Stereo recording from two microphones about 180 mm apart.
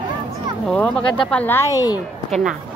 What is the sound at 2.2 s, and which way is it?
Speech, 5° left (ahead or behind).